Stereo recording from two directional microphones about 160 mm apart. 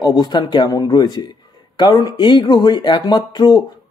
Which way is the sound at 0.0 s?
25° left (ahead or behind).